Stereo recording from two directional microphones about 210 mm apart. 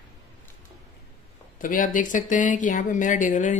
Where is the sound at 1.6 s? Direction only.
40° left (ahead or behind).